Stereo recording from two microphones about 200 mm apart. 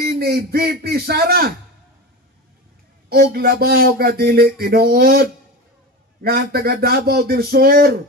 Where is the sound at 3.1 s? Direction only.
50° right (ahead or behind).